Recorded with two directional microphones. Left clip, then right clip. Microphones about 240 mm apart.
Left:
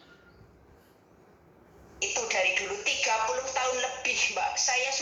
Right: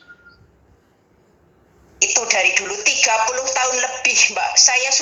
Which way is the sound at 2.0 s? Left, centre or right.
Right.